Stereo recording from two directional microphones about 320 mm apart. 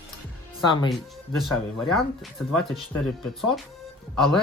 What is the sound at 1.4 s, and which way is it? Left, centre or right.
Speech, centre.